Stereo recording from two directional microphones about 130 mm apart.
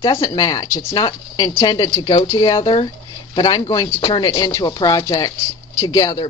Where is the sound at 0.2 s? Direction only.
25° left (ahead or behind).